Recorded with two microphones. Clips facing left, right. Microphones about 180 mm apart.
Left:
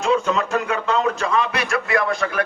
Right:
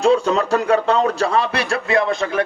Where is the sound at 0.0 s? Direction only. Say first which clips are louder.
Right 4 dB; 35° right (ahead or behind).